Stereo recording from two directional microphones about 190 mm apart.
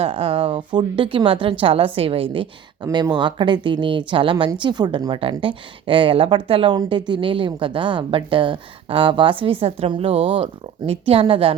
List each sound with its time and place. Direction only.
0.0 s speech: 30° right (ahead or behind)